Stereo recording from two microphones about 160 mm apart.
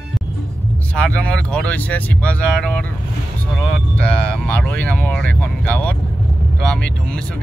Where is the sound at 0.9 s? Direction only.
10° left (ahead or behind).